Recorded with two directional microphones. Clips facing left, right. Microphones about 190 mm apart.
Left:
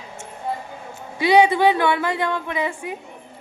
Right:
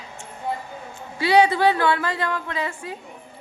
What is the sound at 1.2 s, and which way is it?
A woman's voice, 15° left (ahead or behind).